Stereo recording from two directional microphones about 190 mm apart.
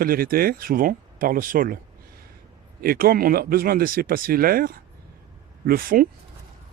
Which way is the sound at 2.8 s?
50° right (ahead or behind).